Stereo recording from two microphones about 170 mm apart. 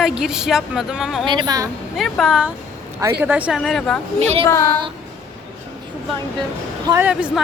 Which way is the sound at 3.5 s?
Centre (ahead or behind).